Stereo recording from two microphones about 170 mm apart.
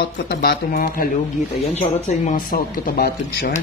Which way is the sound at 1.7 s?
45° left (ahead or behind).